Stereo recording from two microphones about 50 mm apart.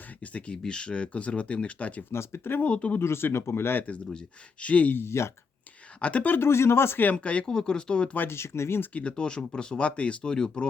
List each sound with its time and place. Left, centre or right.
0.2 s speech: left
0.5 s speech: centre
2.1 s speech: left
2.6 s speech: left
3.0 s speech: left
3.8 s speech: left
4.9 s speech: left
6.0 s speech: left
6.3 s speech: left
7.0 s speech: left
8.3 s speech: left
8.9 s speech: left